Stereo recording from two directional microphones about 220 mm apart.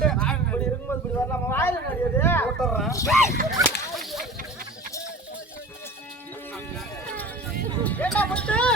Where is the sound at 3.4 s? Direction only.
40° right (ahead or behind).